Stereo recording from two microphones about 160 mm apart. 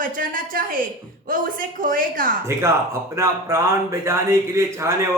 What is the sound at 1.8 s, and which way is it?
Speech, 60° right (ahead or behind).